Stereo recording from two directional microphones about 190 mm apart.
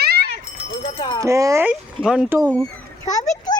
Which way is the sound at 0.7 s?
25° left (ahead or behind).